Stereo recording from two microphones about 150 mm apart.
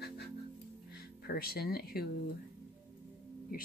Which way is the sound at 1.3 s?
90° left.